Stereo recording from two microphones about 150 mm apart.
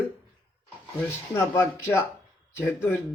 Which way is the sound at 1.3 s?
15° left (ahead or behind).